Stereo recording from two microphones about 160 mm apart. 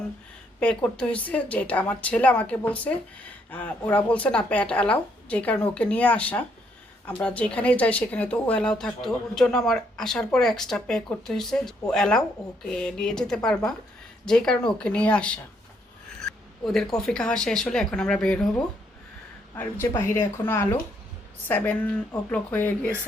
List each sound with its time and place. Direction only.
0.6 s a woman's voice: 5° left (ahead or behind)
16.6 s a woman's voice: centre (ahead or behind)
19.8 s speech: 20° left (ahead or behind)